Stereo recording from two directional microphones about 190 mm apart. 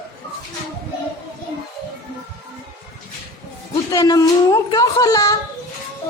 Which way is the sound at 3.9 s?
20° left (ahead or behind).